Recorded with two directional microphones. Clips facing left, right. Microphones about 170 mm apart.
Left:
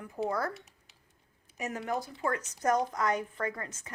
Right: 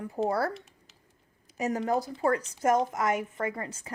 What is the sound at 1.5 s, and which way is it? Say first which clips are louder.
Speech: right 6 dB; 35° right (ahead or behind).